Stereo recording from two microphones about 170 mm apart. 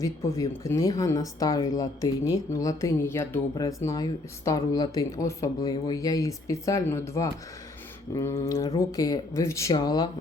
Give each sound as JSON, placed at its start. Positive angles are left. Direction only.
{"t": 0.0, "sound": "speech", "side_deg": 15}